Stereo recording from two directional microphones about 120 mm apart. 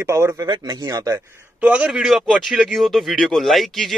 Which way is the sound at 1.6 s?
10° right (ahead or behind).